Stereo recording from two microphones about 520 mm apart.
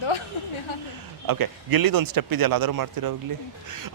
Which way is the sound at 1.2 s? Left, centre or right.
Right.